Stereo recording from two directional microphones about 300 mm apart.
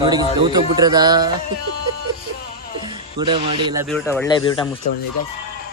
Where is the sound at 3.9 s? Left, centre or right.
Centre.